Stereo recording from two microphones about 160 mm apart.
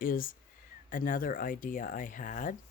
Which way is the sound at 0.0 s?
60° left (ahead or behind).